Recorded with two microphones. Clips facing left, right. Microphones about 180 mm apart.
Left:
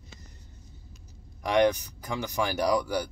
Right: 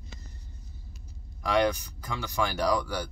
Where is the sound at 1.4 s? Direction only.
15° left (ahead or behind).